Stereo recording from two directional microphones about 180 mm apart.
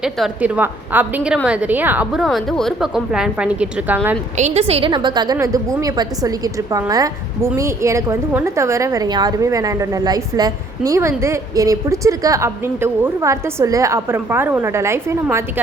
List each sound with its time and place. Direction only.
0.0 s a woman's voice: 5° right (ahead or behind)
4.4 s a woman's voice: 40° right (ahead or behind); by 15.6 s 15° right (ahead or behind)